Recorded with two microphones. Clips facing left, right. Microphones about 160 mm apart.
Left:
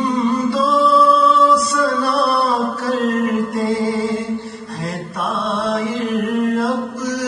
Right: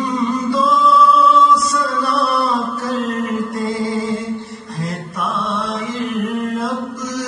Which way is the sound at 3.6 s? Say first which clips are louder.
Left 1 dB; 65° left (ahead or behind).